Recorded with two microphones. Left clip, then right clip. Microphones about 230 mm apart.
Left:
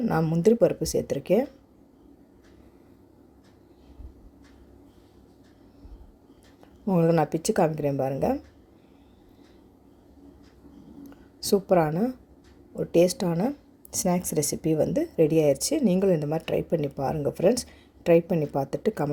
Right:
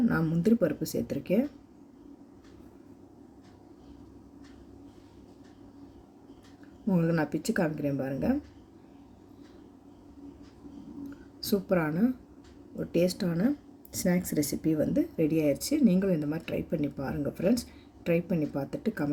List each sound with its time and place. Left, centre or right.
0.0 s a woman's voice: left
6.8 s a woman's voice: left
11.3 s a woman's voice: left